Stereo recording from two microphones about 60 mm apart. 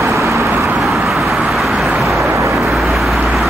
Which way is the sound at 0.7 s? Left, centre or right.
Centre.